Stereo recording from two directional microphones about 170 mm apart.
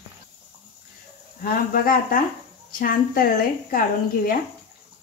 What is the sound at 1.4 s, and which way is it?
Speech, 60° left (ahead or behind).